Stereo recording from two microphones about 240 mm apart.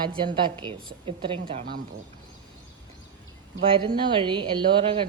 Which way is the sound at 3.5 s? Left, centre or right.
Centre.